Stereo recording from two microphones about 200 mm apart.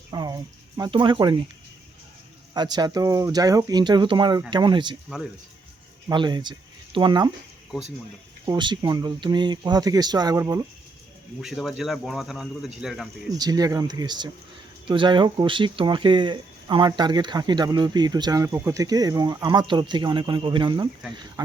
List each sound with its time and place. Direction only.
0.1 s speech: 20° right (ahead or behind)
2.5 s speech: 20° right (ahead or behind)
5.0 s speech: 5° right (ahead or behind)
6.1 s speech: 20° right (ahead or behind)
8.4 s speech: 20° right (ahead or behind)
11.3 s speech: centre (ahead or behind)
13.3 s speech: 20° right (ahead or behind)